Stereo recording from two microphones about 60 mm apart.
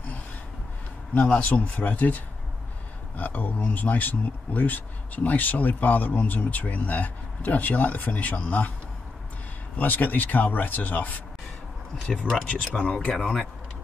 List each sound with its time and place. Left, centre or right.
1.2 s speech: centre
9.8 s speech: left
12.4 s speech: centre